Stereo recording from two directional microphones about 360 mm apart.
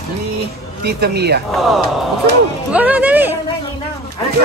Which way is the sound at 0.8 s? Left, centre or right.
Right.